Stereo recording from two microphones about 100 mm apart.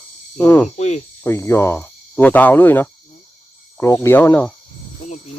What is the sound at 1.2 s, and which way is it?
Speech, 25° left (ahead or behind).